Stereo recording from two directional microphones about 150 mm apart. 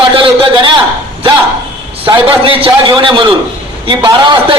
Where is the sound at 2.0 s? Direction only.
35° right (ahead or behind).